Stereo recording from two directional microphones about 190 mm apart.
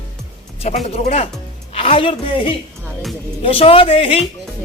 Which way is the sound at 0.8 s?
35° left (ahead or behind).